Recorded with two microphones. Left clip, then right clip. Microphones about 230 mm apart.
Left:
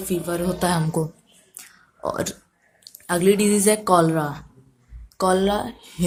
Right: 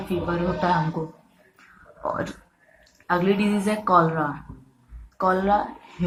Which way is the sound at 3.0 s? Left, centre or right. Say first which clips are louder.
Left 3 dB; left.